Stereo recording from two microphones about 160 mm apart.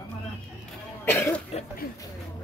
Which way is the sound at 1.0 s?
15° left (ahead or behind).